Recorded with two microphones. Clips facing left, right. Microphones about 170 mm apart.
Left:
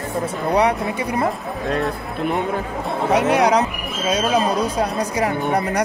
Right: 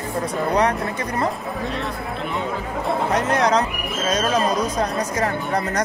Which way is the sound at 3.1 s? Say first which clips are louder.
Left 5 dB; 10° left (ahead or behind).